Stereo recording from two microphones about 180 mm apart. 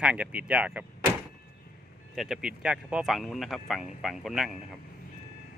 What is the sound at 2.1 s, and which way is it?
A man's voice, centre (ahead or behind).